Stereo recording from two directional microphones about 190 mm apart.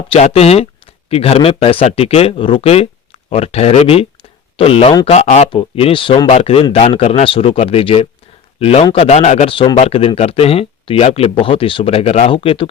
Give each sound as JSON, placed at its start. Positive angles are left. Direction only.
{"t": 0.1, "sound": "speech", "side_deg": 35}